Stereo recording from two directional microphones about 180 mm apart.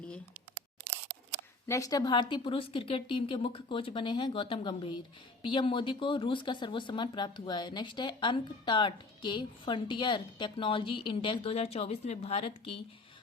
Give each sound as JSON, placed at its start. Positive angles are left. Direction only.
{"t": 1.6, "sound": "speech", "side_deg": 15}